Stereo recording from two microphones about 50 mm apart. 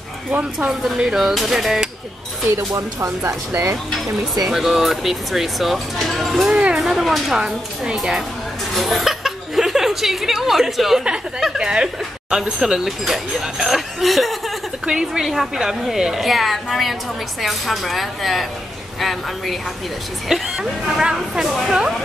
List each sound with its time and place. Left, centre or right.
0.3 s speech: right
0.7 s a woman's voice: centre
2.5 s speech: right
4.5 s speech: centre
6.5 s a sound: centre
6.8 s a woman's voice: centre
14.9 s a woman's voice: centre
21.5 s speech: centre